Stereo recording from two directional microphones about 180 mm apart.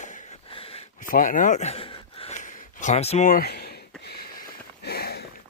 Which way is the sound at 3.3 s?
60° left (ahead or behind).